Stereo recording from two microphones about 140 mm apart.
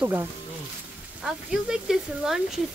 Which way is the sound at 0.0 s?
15° right (ahead or behind).